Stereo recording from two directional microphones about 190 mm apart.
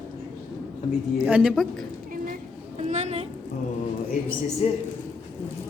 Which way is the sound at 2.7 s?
35° right (ahead or behind).